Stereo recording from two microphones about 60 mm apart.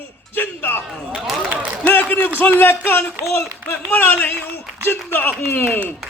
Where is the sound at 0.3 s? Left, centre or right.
Left.